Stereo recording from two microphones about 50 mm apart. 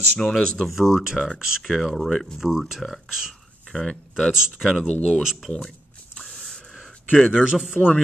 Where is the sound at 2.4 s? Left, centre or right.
Centre.